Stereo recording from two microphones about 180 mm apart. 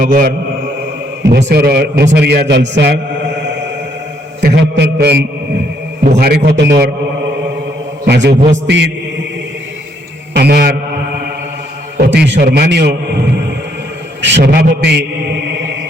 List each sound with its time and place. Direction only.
0.0 s mantra: 50° right (ahead or behind)
1.3 s a man's voice: 70° right (ahead or behind)
8.0 s a man's voice: 70° right (ahead or behind)
10.3 s a man's voice: 65° right (ahead or behind)
11.9 s a man's voice: 70° right (ahead or behind)
14.2 s a man's voice: 85° right; by 15.0 s 65° right (ahead or behind)